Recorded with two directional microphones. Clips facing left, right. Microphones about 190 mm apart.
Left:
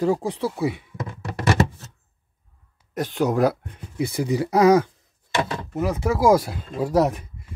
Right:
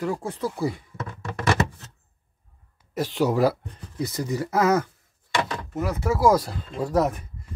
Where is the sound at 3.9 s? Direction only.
10° left (ahead or behind).